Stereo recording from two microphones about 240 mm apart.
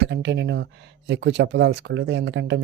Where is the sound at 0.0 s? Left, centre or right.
Right.